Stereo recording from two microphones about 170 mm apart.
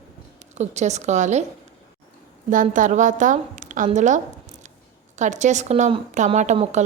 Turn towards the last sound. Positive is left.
turn(degrees=-40)  # may be behind; listen again after turning